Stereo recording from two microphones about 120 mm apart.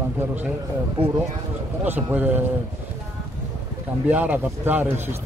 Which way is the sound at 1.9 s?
15° right (ahead or behind).